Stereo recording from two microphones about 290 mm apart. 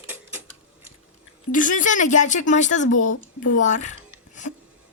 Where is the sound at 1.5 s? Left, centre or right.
Left.